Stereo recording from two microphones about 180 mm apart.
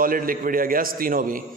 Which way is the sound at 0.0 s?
50° right (ahead or behind).